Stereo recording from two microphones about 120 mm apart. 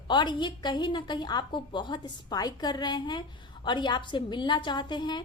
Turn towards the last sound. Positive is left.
turn(degrees=40)  # may be behind; listen again after turning